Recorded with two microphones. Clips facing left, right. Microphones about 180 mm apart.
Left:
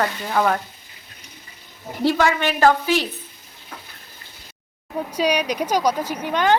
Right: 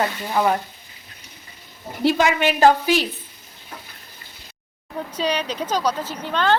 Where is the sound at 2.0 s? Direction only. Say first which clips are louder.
Right 1 dB; 20° right (ahead or behind).